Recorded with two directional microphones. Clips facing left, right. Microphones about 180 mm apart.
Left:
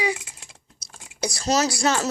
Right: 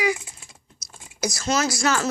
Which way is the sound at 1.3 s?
35° left (ahead or behind).